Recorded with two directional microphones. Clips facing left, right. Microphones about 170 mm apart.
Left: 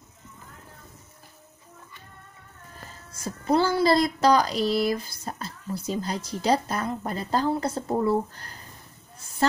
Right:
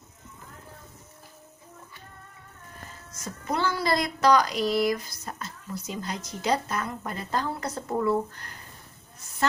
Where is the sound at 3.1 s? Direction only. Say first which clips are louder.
Left 7 dB; 30° left (ahead or behind).